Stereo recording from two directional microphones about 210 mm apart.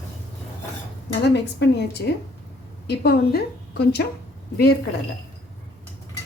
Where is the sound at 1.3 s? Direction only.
50° left (ahead or behind).